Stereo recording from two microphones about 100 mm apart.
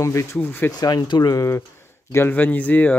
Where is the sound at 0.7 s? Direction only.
40° left (ahead or behind).